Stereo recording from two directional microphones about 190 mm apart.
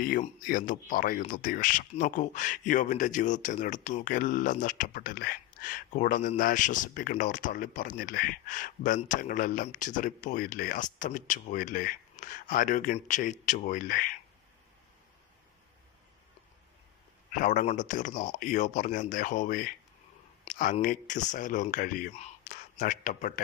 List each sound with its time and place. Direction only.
0.0 s speech: 45° left (ahead or behind)
17.3 s speech: 40° left (ahead or behind)